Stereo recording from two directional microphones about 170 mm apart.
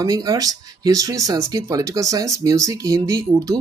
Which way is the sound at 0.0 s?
20° right (ahead or behind).